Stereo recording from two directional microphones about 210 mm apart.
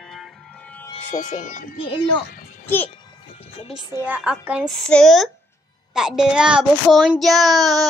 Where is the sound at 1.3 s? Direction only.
35° left (ahead or behind).